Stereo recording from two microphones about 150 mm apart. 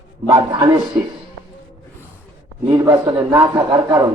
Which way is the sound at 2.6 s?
20° right (ahead or behind).